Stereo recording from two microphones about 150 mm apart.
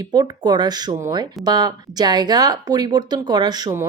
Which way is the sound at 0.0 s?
25° right (ahead or behind).